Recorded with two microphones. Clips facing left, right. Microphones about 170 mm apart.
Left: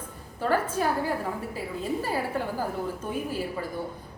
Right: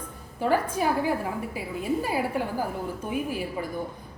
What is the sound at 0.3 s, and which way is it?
A woman's voice, 10° right (ahead or behind).